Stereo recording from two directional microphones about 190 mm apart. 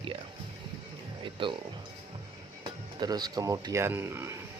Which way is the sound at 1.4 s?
25° right (ahead or behind).